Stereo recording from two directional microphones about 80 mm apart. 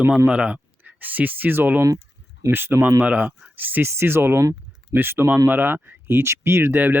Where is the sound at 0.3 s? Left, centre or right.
Centre.